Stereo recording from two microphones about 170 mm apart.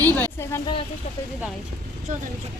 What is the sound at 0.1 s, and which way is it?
Speech, 15° left (ahead or behind).